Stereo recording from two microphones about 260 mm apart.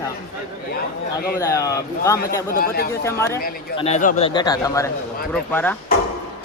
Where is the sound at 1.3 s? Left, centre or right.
Centre.